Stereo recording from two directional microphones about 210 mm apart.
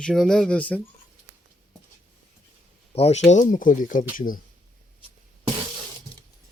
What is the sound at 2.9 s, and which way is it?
Speech, 30° left (ahead or behind).